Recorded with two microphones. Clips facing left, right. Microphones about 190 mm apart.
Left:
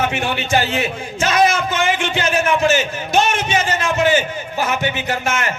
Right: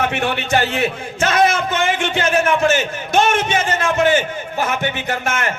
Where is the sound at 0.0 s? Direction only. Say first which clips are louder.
Right 1 dB; 60° right (ahead or behind).